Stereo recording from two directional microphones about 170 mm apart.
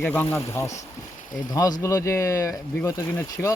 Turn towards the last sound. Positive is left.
turn(degrees=15)  # may be behind; listen again after turning